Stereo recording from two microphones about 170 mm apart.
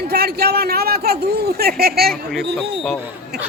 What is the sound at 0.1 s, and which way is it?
A man's voice, 65° right (ahead or behind).